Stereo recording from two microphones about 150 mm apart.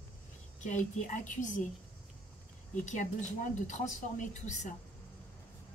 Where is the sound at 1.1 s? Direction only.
55° left (ahead or behind).